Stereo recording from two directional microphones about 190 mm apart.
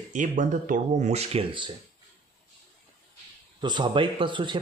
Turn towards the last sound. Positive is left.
turn(degrees=-25)  # may be behind; listen again after turning